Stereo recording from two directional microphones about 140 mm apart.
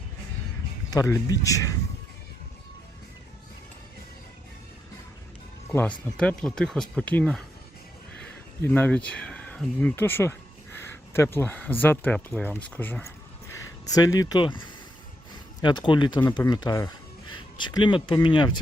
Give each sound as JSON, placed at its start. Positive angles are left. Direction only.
{"t": 0.9, "sound": "speech", "side_deg": 25}
{"t": 5.7, "sound": "speech", "side_deg": 10}
{"t": 13.5, "sound": "speech", "side_deg": 25}
{"t": 15.6, "sound": "speech", "side_deg": 35}